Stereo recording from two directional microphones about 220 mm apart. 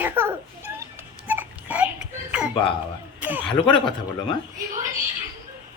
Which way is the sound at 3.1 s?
10° right (ahead or behind).